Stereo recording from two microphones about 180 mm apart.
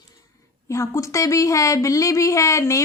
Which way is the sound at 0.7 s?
15° left (ahead or behind).